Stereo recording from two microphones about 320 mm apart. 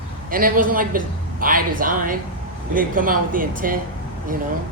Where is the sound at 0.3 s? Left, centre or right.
Right.